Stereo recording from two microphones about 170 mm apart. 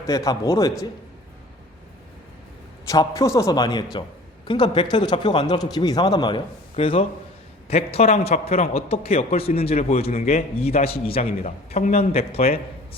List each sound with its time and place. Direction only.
0.1 s speech: 20° left (ahead or behind)
2.9 s a man's voice: 20° left (ahead or behind); by 12.5 s 35° left (ahead or behind)